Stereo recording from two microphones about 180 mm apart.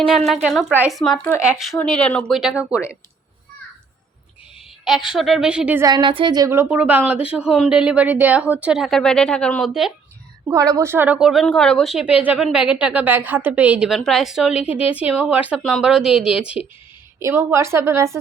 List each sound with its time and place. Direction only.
0.4 s a woman's voice: 5° right (ahead or behind)
4.9 s a woman's voice: centre (ahead or behind)
5.8 s a woman's voice: 25° right (ahead or behind); by 9.9 s centre (ahead or behind)
10.5 s a woman's voice: 15° right (ahead or behind)
17.2 s a woman's voice: 15° right (ahead or behind)